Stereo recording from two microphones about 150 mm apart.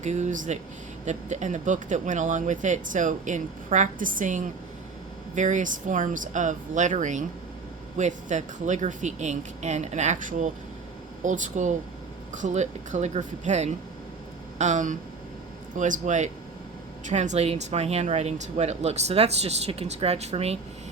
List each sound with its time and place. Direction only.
0.0 s speech: 50° right (ahead or behind)